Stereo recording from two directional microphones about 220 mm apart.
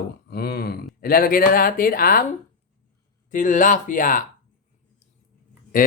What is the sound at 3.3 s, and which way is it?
Speech, 35° left (ahead or behind).